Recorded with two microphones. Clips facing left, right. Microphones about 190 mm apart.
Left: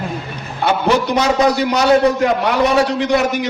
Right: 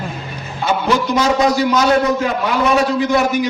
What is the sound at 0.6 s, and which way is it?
A man's voice, 65° left (ahead or behind).